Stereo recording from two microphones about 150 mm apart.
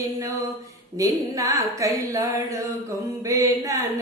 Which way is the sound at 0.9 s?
20° right (ahead or behind).